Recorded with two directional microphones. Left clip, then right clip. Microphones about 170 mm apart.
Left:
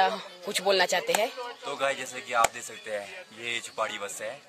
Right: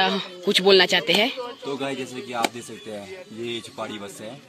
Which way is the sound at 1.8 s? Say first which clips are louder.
Even; centre (ahead or behind).